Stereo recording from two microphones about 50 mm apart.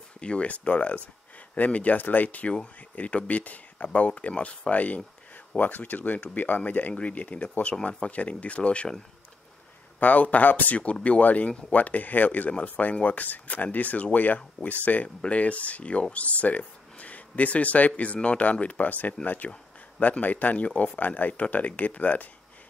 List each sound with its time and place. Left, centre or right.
0.2 s speech: left
9.9 s speech: left